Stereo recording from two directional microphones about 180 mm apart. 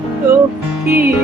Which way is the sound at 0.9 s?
10° right (ahead or behind).